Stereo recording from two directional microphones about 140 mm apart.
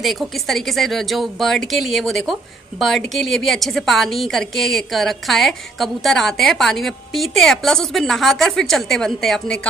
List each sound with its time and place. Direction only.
0.0 s a woman's voice: centre (ahead or behind)